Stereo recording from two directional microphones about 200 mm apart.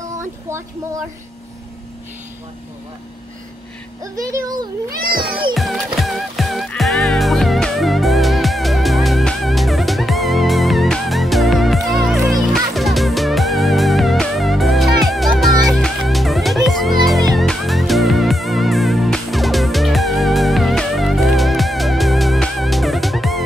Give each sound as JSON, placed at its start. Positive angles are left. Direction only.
{"t": 0.0, "sound": "speech", "side_deg": -15}
{"t": 4.0, "sound": "speech", "side_deg": -15}
{"t": 5.0, "sound": "music", "side_deg": -50}
{"t": 5.5, "sound": "music", "side_deg": 0}